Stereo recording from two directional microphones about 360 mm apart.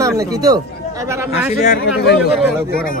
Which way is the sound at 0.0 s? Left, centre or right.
Centre.